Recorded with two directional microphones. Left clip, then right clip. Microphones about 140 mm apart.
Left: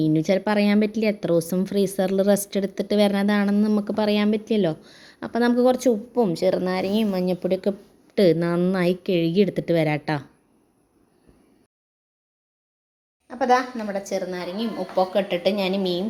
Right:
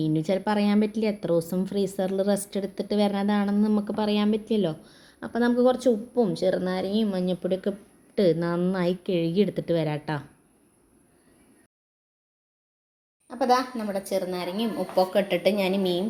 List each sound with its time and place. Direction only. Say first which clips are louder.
0.0 s speech: left 5 dB; 40° left (ahead or behind)
13.2 s speech: left 3 dB; centre (ahead or behind)